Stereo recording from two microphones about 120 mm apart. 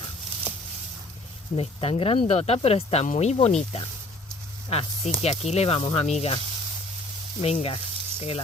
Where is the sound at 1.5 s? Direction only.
55° left (ahead or behind).